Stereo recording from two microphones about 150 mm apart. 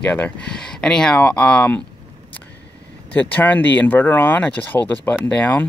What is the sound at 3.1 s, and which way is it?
Speech, 10° left (ahead or behind).